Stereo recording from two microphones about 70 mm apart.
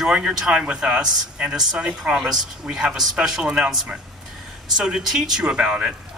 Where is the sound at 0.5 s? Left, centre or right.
Centre.